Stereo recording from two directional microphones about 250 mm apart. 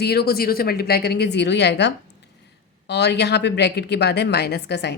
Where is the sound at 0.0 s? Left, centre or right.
Left.